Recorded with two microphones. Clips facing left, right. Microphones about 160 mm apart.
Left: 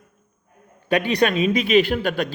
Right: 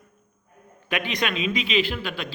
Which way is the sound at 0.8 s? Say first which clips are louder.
Left 8 dB; 35° left (ahead or behind).